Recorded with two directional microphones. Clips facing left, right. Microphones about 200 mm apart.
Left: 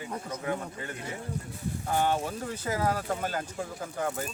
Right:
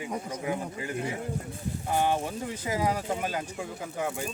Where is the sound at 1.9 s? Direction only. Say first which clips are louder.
Right 1 dB; 10° right (ahead or behind).